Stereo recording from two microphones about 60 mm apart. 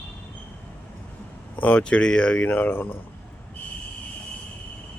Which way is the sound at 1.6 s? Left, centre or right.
Left.